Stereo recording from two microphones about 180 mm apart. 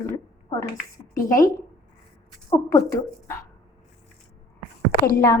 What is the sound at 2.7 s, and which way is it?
Speech, 15° left (ahead or behind).